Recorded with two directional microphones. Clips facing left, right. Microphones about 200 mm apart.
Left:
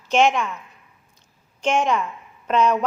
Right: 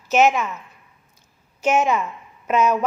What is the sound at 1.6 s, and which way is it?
A woman's voice, 5° right (ahead or behind).